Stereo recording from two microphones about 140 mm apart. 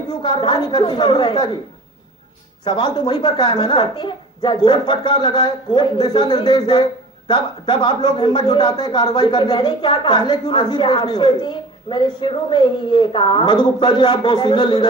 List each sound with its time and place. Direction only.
0.1 s speech: 35° left (ahead or behind)
2.6 s speech: 30° left (ahead or behind)